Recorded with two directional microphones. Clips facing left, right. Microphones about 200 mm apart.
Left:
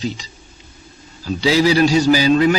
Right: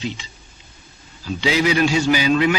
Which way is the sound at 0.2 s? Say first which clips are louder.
Left 2 dB; 40° left (ahead or behind).